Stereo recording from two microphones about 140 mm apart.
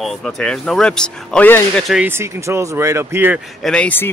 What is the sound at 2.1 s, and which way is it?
Speech, 20° right (ahead or behind).